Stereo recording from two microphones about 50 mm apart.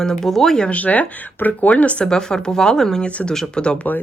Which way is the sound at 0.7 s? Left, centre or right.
Left.